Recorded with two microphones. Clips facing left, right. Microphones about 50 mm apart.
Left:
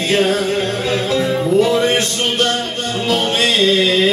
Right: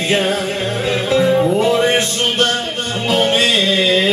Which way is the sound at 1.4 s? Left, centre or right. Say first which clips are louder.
Even; right.